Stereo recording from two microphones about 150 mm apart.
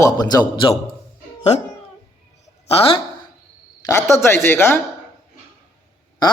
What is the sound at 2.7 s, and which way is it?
Speech, 40° left (ahead or behind).